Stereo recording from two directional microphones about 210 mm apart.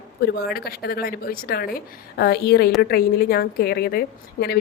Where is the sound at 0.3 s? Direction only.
45° left (ahead or behind).